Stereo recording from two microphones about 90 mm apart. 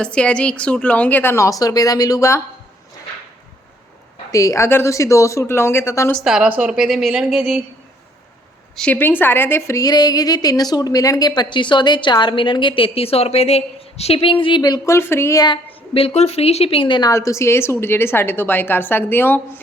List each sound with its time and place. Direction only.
0.0 s a woman's voice: 10° left (ahead or behind)
1.5 s speech: 45° left (ahead or behind)
4.3 s speech: 40° left (ahead or behind)
6.2 s speech: 5° right (ahead or behind)
8.7 s a woman's voice: 10° left (ahead or behind)
9.0 s a woman's voice: 25° left (ahead or behind)
9.8 s a woman's voice: 45° left (ahead or behind); by 14.6 s 75° left (ahead or behind)
14.8 s a woman's voice: 25° left (ahead or behind)
16.6 s a woman's voice: 80° left
17.1 s a woman's voice: 35° left (ahead or behind)